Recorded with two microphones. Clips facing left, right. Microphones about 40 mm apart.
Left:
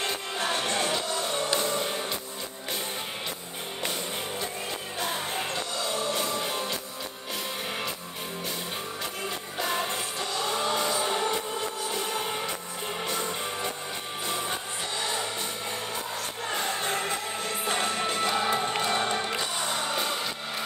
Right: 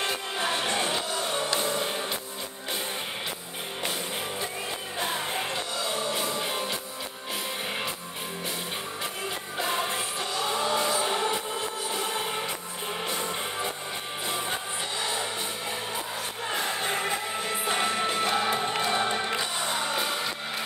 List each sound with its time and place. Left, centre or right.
0.0 s music: centre
4.9 s music: centre
9.6 s music: centre
16.4 s music: centre